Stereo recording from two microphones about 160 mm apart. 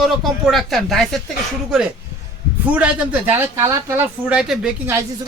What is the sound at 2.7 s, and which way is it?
Speech, 10° right (ahead or behind).